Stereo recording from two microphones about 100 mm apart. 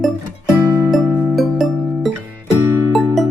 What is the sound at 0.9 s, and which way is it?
Music, centre (ahead or behind).